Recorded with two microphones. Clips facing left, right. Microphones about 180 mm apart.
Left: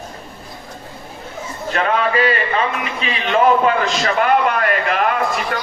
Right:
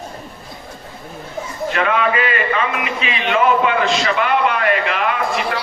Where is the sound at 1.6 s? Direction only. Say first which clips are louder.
Even; 35° left (ahead or behind).